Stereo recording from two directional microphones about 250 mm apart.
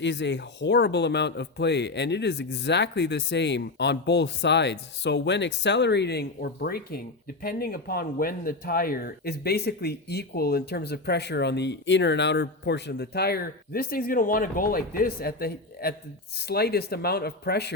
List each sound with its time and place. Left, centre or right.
0.0 s speech: left